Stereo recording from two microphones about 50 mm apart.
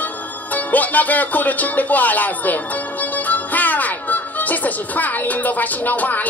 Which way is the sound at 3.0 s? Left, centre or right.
Left.